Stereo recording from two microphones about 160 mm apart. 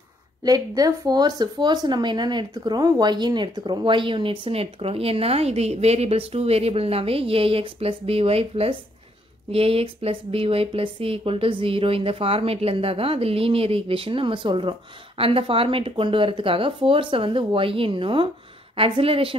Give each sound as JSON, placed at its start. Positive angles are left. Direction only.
{"t": 0.4, "sound": "speech", "side_deg": -25}